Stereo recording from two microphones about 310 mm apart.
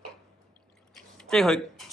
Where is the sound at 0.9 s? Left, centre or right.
Centre.